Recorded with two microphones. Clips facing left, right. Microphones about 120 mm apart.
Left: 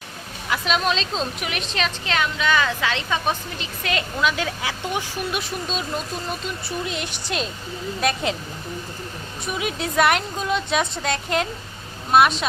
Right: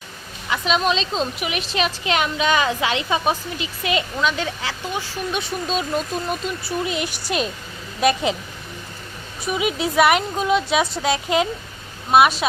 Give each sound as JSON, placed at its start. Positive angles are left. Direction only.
{"t": 0.5, "sound": "a woman's voice", "side_deg": 0}
{"t": 2.0, "sound": "a woman's voice", "side_deg": -20}
{"t": 4.2, "sound": "a woman's voice", "side_deg": 5}
{"t": 4.8, "sound": "speech", "side_deg": 20}
{"t": 5.3, "sound": "a woman's voice", "side_deg": 0}
{"t": 9.4, "sound": "a woman's voice", "side_deg": -5}